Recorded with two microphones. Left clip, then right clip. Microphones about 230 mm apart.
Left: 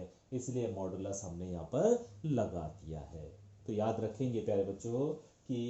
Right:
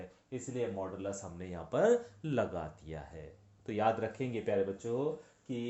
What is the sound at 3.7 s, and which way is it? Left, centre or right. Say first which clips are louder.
Speech: right 4 dB; right.